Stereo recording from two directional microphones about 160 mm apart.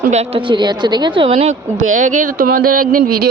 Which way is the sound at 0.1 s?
40° right (ahead or behind).